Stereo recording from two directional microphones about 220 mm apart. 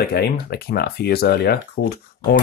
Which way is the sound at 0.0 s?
45° left (ahead or behind).